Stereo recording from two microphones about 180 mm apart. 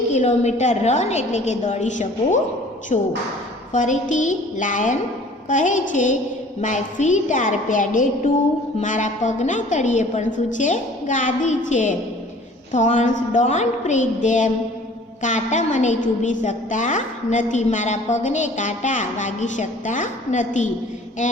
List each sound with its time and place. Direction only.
0.1 s a woman's voice: 40° left (ahead or behind)